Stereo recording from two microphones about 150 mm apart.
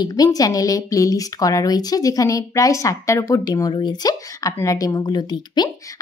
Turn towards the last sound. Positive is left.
turn(degrees=30)  # may be behind; listen again after turning